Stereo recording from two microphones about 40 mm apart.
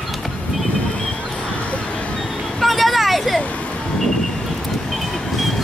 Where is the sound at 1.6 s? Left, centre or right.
Left.